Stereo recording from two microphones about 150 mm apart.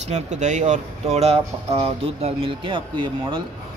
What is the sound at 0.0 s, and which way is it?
Speech, 50° right (ahead or behind).